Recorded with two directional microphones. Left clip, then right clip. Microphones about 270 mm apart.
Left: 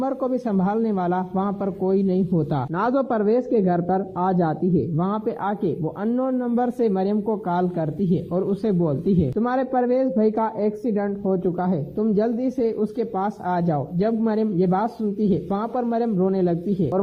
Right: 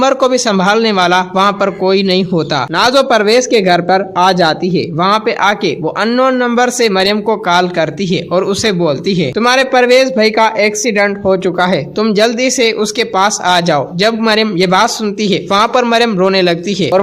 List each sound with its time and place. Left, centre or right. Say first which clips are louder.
0.1 s a man's voice: right 14 dB; centre